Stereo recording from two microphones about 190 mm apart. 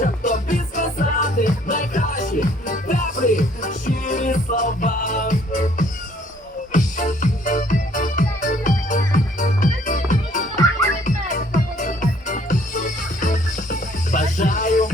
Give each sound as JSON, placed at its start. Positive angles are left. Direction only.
{"t": 0.0, "sound": "music", "side_deg": 40}
{"t": 11.5, "sound": "music", "side_deg": 45}